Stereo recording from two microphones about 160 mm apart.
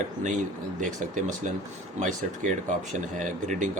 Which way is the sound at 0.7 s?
50° right (ahead or behind).